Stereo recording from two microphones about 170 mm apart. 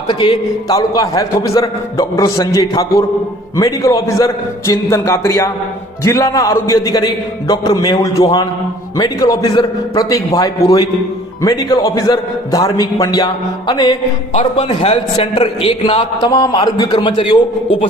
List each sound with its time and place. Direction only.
0.1 s a man's voice: 30° left (ahead or behind)
16.3 s a man's voice: 20° left (ahead or behind)